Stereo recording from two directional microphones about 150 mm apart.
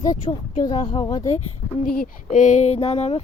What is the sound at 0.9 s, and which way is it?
Speech, 25° left (ahead or behind).